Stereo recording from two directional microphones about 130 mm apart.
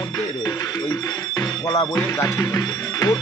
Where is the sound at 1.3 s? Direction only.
30° left (ahead or behind).